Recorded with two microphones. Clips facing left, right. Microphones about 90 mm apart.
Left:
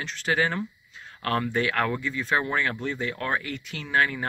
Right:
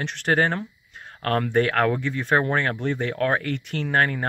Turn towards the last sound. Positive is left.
turn(degrees=-50)  # may be behind; listen again after turning